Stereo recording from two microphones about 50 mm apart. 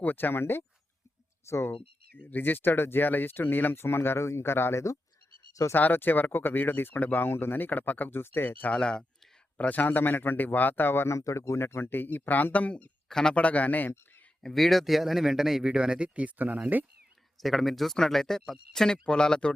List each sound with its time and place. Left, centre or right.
0.0 s speech: left
1.5 s speech: left
2.2 s speech: left
5.7 s speech: left
8.7 s speech: centre
9.6 s speech: left
13.1 s speech: centre
13.3 s speech: left
14.4 s speech: centre
15.6 s speech: centre
17.4 s speech: centre